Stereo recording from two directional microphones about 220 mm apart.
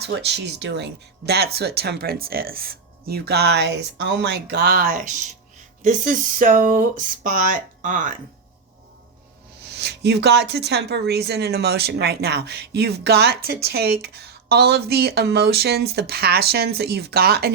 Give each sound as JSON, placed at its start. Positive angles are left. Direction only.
{"t": 0.0, "sound": "a woman's voice", "side_deg": -50}
{"t": 9.6, "sound": "a woman's voice", "side_deg": -50}